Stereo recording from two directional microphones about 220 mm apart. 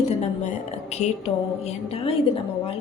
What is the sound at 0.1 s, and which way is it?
A woman's voice, 30° left (ahead or behind).